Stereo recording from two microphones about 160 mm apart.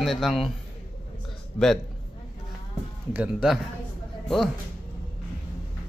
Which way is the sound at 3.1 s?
5° right (ahead or behind).